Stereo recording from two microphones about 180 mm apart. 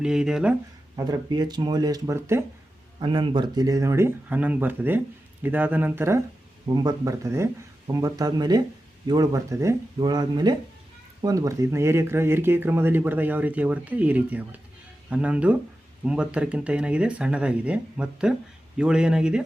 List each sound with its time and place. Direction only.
0.0 s speech: 5° right (ahead or behind)
0.9 s speech: 20° right (ahead or behind)
3.0 s speech: 25° right (ahead or behind)
6.7 s speech: 20° right (ahead or behind); by 19.5 s 5° right (ahead or behind)